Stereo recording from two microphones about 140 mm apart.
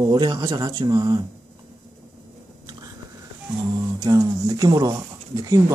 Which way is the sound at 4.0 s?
25° right (ahead or behind).